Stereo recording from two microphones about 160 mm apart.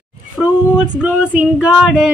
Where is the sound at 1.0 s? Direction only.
5° right (ahead or behind).